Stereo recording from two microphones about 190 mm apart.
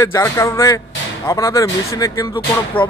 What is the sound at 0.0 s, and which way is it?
Speech, 15° left (ahead or behind).